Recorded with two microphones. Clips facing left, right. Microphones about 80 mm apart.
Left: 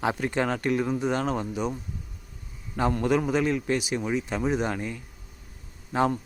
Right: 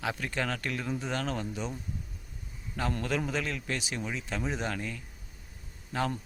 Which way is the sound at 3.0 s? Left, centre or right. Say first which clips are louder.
Left 10 dB; centre.